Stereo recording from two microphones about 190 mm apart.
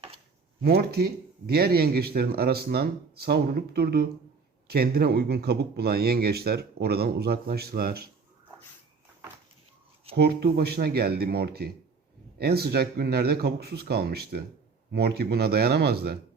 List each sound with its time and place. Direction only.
0.6 s speech: 55° right (ahead or behind)
10.2 s speech: 60° right (ahead or behind)